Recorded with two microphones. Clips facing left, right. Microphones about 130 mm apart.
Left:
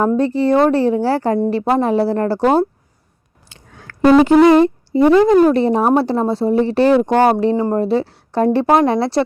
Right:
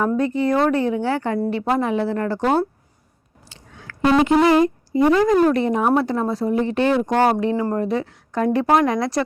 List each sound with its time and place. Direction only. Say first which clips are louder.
0.1 s a woman's voice: left 5 dB; 30° left (ahead or behind)
3.5 s a sound: left 1 dB; 45° left (ahead or behind)
4.4 s a woman's voice: left 5 dB; 30° left (ahead or behind)